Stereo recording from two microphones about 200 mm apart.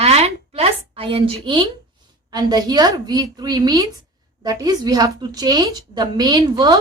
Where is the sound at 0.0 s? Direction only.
30° right (ahead or behind).